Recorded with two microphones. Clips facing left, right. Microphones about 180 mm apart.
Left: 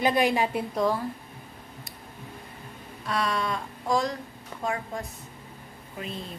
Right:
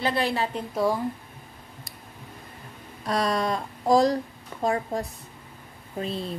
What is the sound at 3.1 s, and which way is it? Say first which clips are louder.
Speech: right 3 dB; 40° right (ahead or behind).